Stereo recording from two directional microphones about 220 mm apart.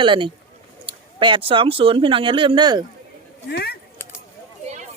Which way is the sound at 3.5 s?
45° left (ahead or behind).